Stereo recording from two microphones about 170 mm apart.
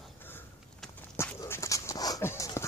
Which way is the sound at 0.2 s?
10° left (ahead or behind).